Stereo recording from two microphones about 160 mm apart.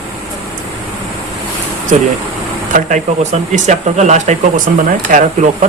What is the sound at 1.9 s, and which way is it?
Speech, 50° right (ahead or behind).